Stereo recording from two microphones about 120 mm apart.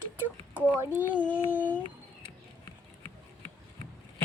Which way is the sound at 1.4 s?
15° left (ahead or behind).